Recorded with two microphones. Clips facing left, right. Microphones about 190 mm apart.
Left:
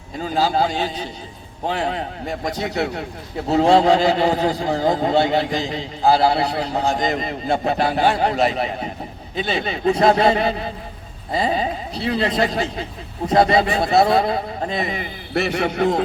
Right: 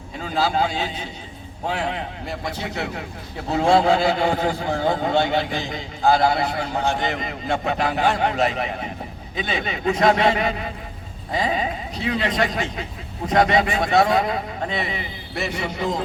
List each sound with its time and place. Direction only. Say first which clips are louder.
0.4 s a man's voice: left 2 dB; 35° left (ahead or behind)
15.4 s a man's voice: left 7 dB; 65° left (ahead or behind)